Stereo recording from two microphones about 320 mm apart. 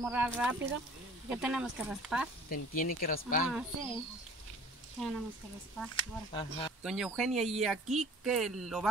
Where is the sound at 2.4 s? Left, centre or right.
Left.